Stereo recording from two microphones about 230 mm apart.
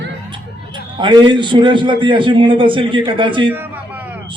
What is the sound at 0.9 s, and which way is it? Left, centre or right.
A man's voice, centre.